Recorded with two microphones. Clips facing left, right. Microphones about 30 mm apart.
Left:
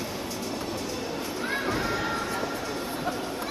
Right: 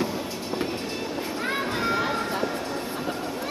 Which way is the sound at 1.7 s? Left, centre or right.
Right.